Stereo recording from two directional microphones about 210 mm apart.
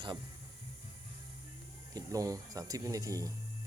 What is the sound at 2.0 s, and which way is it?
Speech, 15° right (ahead or behind).